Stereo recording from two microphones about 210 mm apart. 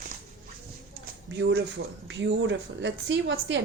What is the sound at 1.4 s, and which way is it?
A woman's voice, 50° right (ahead or behind).